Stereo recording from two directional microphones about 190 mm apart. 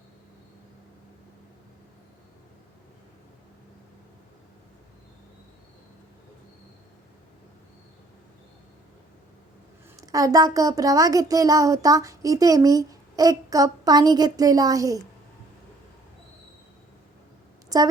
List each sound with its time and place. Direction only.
10.0 s a child's voice: 20° right (ahead or behind)
17.7 s a woman's voice: 20° right (ahead or behind)